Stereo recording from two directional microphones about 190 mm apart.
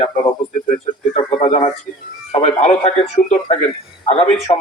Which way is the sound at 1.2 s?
35° left (ahead or behind).